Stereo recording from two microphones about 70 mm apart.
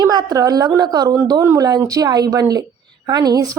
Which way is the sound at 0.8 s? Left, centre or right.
Right.